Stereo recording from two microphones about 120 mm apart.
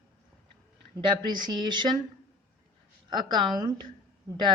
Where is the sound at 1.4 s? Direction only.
40° right (ahead or behind).